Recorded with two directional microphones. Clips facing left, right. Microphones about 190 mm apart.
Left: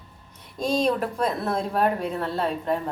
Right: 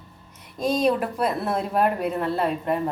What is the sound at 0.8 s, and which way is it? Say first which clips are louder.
Speech: right 2 dB; 10° right (ahead or behind).